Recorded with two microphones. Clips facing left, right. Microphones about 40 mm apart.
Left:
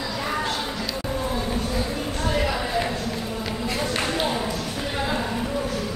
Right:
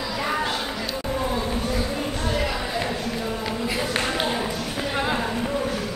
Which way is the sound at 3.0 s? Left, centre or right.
Centre.